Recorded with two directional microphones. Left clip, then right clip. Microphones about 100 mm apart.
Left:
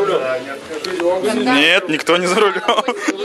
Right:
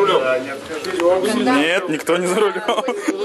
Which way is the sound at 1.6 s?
15° left (ahead or behind).